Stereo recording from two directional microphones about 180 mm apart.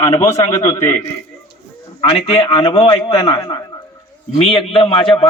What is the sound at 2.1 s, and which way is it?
A man's voice, 35° left (ahead or behind).